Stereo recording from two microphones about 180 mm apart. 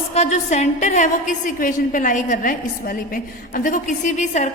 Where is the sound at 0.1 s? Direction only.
40° left (ahead or behind).